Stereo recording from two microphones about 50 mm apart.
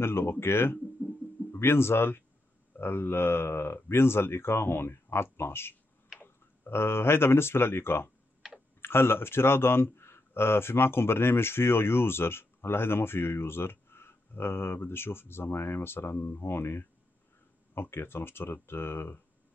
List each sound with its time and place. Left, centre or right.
0.0 s speech: left
1.0 s a sound: left
1.5 s speech: left